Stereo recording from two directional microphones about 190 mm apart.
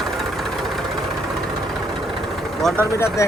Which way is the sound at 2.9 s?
15° left (ahead or behind).